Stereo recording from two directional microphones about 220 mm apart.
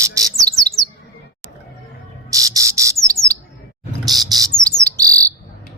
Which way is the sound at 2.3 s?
15° right (ahead or behind).